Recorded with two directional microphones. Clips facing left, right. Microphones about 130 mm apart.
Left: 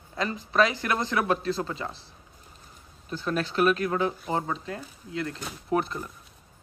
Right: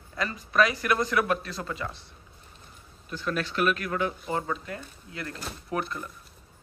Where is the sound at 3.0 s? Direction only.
35° left (ahead or behind).